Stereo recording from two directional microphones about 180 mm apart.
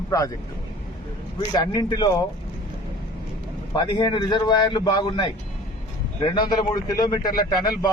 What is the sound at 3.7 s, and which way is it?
Speech, 25° left (ahead or behind).